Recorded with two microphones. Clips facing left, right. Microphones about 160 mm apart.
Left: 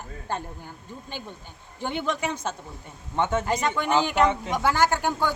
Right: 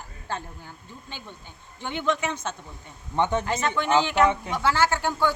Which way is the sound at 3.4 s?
10° left (ahead or behind).